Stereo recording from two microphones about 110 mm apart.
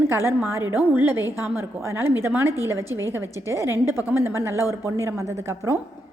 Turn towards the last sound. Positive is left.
turn(degrees=-25)  # may be behind; listen again after turning